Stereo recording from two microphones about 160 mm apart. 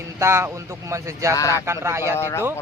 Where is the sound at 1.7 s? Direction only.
15° right (ahead or behind).